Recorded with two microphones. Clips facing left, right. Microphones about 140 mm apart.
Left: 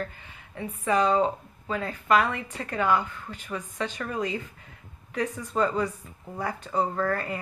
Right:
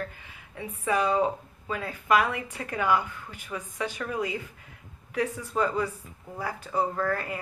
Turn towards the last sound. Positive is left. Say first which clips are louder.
# left 1 dB
turn(degrees=-5)  # may be behind; listen again after turning